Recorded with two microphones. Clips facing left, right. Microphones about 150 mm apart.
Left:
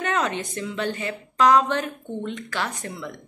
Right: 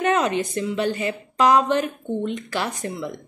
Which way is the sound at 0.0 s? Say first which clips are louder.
Right 5 dB; 15° right (ahead or behind).